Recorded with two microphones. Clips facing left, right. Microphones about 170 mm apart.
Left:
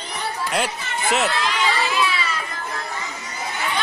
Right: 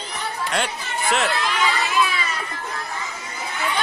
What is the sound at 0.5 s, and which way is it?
Speech, centre (ahead or behind).